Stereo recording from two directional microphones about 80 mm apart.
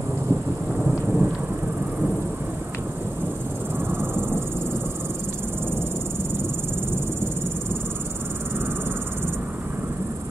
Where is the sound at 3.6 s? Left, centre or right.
Right.